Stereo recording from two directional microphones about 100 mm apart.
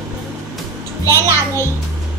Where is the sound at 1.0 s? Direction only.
30° left (ahead or behind).